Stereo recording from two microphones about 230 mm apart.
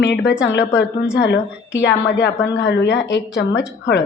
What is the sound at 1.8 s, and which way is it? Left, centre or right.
A woman's voice, left.